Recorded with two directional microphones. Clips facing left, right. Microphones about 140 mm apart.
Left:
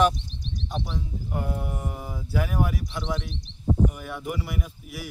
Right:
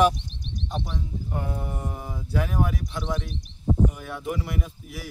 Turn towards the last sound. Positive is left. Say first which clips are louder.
# right 1 dB
turn(degrees=0)  # may be behind; listen again after turning